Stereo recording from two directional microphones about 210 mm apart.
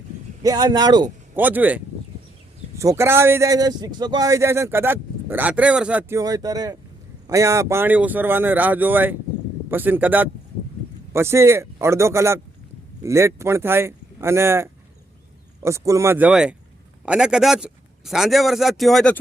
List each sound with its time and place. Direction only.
0.4 s speech: 20° right (ahead or behind)
1.4 s a man's voice: 10° right (ahead or behind)